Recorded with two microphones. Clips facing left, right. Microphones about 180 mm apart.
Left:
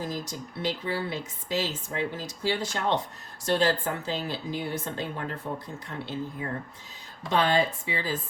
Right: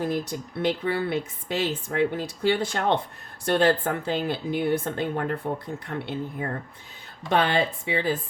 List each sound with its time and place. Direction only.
0.0 s a woman's voice: 60° right (ahead or behind)